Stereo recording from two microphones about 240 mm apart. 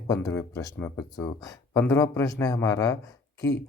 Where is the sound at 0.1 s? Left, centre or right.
Centre.